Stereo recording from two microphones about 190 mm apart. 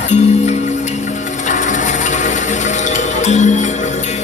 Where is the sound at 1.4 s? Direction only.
40° left (ahead or behind).